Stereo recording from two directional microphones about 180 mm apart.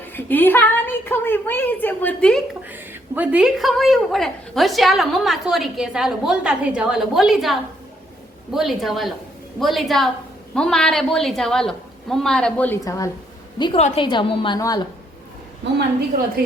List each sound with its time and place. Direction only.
0.1 s a woman's voice: 10° left (ahead or behind)
2.6 s a woman's voice: 10° right (ahead or behind)
8.5 s a woman's voice: centre (ahead or behind); by 14.8 s 20° left (ahead or behind)